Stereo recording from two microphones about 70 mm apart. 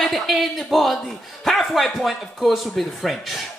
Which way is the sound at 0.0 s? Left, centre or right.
Centre.